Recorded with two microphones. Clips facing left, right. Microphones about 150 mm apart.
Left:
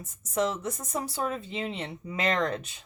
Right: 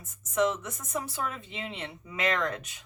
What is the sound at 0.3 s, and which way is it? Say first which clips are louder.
Speech: right 1 dB; 35° left (ahead or behind).